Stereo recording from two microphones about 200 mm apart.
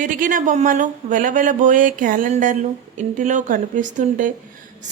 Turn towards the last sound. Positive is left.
turn(degrees=-40)  # may be behind; listen again after turning